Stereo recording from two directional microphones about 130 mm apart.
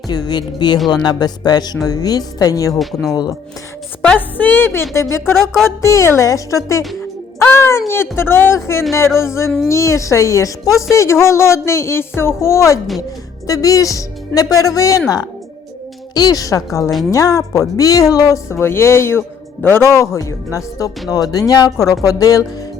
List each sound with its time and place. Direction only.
0.1 s speech: 30° left (ahead or behind)
2.7 s speech: centre (ahead or behind)
4.0 s a woman's voice: 10° left (ahead or behind); by 22.4 s 30° left (ahead or behind)